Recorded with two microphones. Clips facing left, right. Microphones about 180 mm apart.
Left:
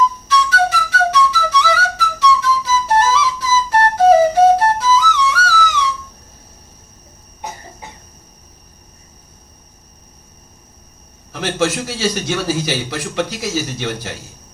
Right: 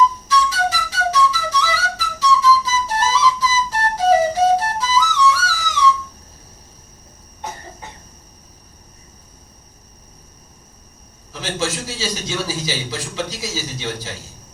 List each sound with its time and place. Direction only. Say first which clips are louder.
0.3 s flute: left 3 dB; 60° left (ahead or behind)
11.3 s a man's voice: left 5 dB; 60° left (ahead or behind)